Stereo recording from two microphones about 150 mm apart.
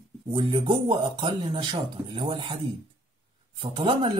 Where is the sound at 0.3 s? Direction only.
35° right (ahead or behind).